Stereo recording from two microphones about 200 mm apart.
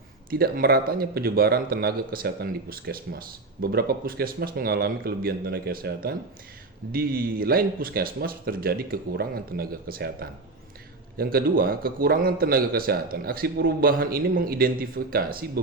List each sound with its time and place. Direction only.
0.3 s a man's voice: 45° right (ahead or behind)